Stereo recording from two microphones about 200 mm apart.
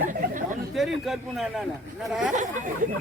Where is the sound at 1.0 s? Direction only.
Centre (ahead or behind).